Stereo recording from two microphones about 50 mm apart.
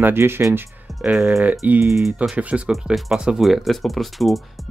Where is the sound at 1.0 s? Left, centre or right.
Right.